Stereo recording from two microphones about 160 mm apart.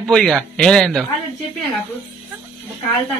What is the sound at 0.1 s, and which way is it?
Speech, 5° left (ahead or behind).